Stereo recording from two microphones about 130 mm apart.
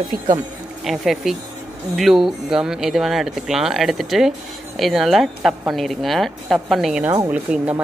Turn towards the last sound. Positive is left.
turn(degrees=-10)  # may be behind; listen again after turning